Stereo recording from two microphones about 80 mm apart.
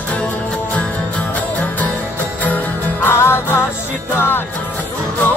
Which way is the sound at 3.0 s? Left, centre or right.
Left.